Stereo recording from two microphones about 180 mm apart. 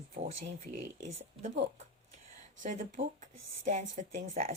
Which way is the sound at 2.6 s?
45° right (ahead or behind).